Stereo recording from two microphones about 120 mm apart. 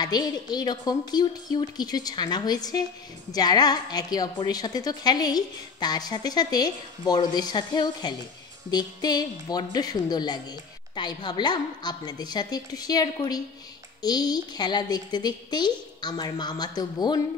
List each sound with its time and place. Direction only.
0.0 s a woman's voice: 35° left (ahead or behind)